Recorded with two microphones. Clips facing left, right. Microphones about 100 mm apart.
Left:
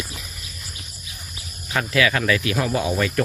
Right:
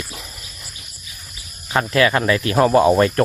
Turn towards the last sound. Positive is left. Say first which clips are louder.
# right 9 dB
turn(degrees=-45)  # may be behind; listen again after turning